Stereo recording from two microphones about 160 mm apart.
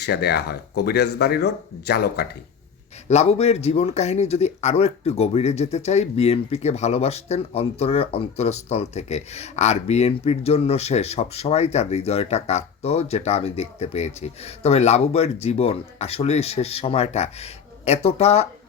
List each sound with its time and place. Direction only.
0.0 s speech: 90° left
3.1 s speech: 40° left (ahead or behind)